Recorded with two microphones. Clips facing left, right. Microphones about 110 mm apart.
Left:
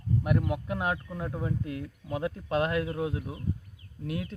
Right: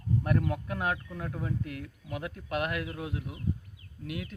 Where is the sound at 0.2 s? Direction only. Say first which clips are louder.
Left 2 dB; 10° left (ahead or behind).